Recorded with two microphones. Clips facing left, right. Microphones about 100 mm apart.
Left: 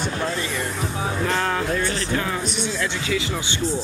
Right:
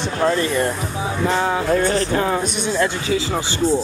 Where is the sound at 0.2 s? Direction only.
50° right (ahead or behind).